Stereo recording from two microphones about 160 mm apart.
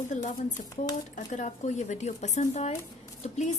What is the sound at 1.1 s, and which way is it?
Speech, 50° left (ahead or behind).